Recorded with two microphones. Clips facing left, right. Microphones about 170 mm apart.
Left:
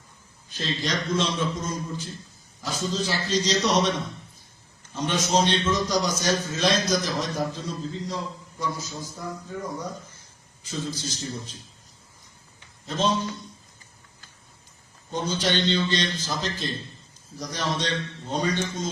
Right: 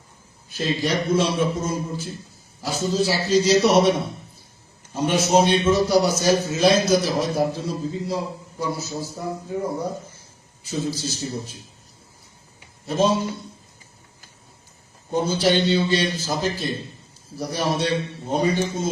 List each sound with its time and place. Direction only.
0.5 s a man's voice: 10° right (ahead or behind)
9.1 s a sound: 30° right (ahead or behind)
9.5 s speech: 30° right (ahead or behind)
10.6 s a man's voice: 10° right (ahead or behind)
12.8 s a man's voice: 10° right (ahead or behind)
15.1 s a man's voice: 10° right (ahead or behind)